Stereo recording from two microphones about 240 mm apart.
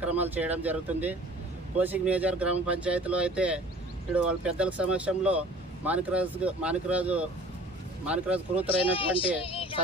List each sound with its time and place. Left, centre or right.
0.0 s speech: centre
8.9 s speech: left
9.4 s a sound: left